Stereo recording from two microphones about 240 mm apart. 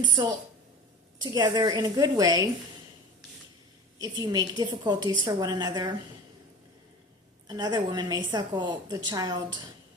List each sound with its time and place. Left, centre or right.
0.0 s a woman's voice: centre
3.9 s a woman's voice: centre
7.4 s a woman's voice: centre